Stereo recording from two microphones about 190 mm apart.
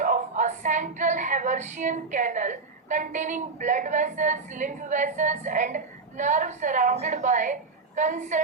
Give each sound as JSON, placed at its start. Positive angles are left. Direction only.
{"t": 0.0, "sound": "speech", "side_deg": -40}